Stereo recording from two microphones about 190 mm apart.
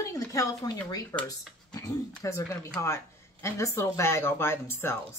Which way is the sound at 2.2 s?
15° left (ahead or behind).